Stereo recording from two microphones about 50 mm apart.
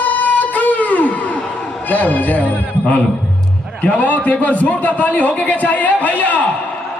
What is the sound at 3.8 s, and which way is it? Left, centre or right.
A man's voice, left.